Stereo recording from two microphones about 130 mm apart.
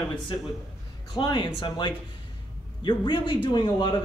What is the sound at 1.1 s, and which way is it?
Speech, 35° left (ahead or behind).